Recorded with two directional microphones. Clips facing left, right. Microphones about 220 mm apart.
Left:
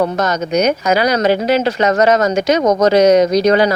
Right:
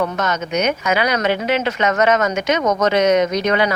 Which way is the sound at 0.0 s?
35° left (ahead or behind).